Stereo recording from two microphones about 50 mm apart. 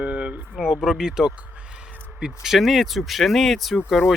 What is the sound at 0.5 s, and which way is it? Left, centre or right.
Speech, centre.